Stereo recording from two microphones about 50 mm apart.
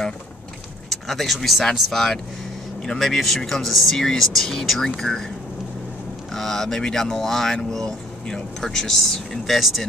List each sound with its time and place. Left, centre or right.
1.0 s speech: centre
6.3 s speech: centre